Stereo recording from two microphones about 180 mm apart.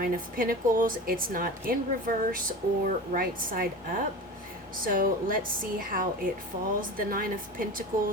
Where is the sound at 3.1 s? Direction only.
50° right (ahead or behind).